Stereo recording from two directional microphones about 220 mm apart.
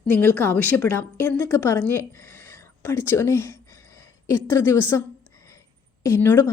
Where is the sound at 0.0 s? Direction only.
10° left (ahead or behind).